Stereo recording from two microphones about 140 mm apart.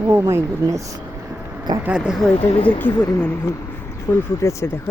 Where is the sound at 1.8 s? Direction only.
5° right (ahead or behind).